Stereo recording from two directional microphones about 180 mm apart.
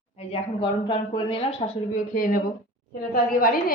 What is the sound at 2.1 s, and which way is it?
Speech, 50° left (ahead or behind).